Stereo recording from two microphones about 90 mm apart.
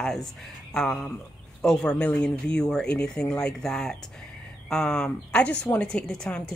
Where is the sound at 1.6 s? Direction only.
10° left (ahead or behind).